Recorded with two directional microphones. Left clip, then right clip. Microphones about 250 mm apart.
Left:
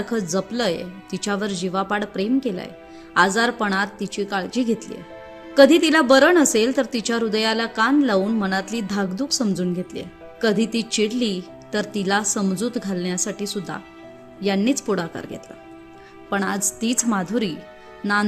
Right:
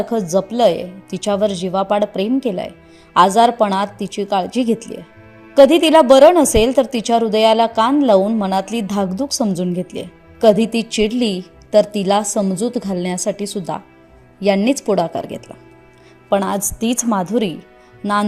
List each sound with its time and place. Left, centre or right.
0.0 s speech: centre